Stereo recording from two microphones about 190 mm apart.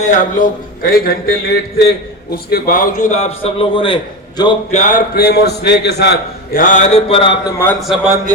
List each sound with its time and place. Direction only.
0.0 s speech: 40° left (ahead or behind); by 4.5 s 25° left (ahead or behind)
4.7 s speech: 35° left (ahead or behind)
5.1 s a man's voice: 55° left (ahead or behind); by 7.5 s 30° left (ahead or behind)
7.8 s a man's voice: centre (ahead or behind)